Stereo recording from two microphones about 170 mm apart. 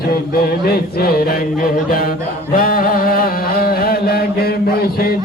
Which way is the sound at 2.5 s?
55° left (ahead or behind).